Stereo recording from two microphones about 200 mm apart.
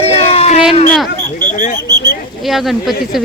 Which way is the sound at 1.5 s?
40° left (ahead or behind).